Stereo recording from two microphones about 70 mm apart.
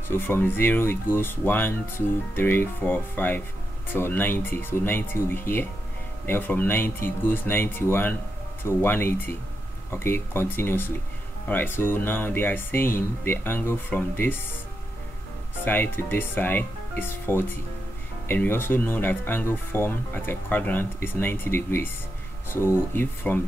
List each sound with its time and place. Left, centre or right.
0.1 s speech: left
15.6 s speech: left